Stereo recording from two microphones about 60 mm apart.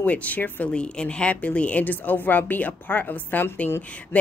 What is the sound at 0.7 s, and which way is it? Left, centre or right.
Speech, centre.